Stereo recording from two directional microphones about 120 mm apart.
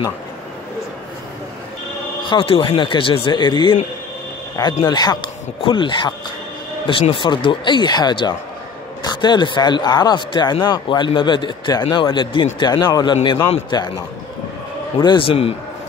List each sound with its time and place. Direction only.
2.2 s a man's voice: 45° left (ahead or behind)
4.8 s a man's voice: 35° left (ahead or behind); by 15.5 s 50° left (ahead or behind)